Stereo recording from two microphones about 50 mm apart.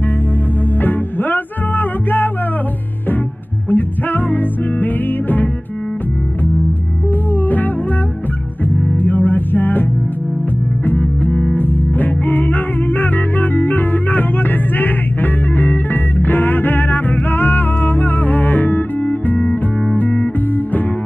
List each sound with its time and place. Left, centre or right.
0.8 s music: left
3.7 s music: left
7.4 s music: left
10.9 s music: left